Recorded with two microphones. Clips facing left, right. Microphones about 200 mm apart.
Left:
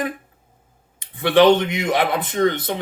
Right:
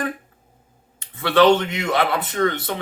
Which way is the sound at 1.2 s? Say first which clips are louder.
Left 2 dB; 15° left (ahead or behind).